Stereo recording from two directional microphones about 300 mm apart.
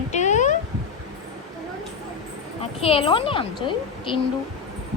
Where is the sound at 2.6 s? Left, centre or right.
Centre.